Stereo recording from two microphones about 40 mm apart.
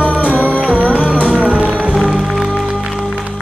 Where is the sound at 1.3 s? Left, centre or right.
Right.